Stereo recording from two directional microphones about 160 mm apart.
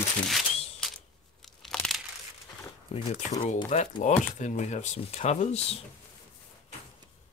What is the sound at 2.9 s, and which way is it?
Speech, 35° left (ahead or behind).